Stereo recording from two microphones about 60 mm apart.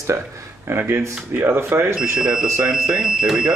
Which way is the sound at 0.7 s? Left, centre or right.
Right.